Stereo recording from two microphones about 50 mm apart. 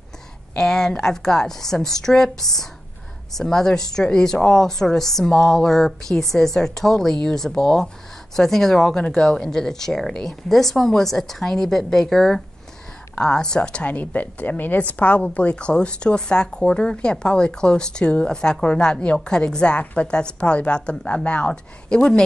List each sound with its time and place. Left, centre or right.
0.6 s a woman's voice: centre